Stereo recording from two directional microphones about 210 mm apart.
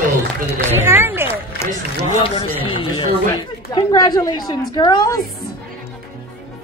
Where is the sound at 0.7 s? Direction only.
10° right (ahead or behind).